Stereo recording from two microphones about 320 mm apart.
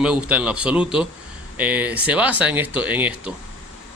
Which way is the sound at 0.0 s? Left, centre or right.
Centre.